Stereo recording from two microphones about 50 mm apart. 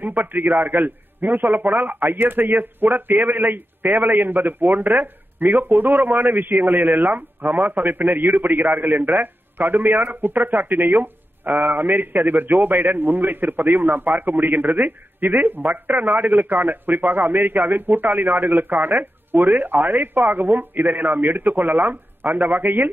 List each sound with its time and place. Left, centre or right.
0.0 s a man's voice: right